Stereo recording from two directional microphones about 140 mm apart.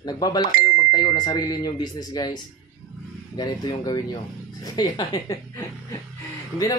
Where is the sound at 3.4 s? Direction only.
30° left (ahead or behind).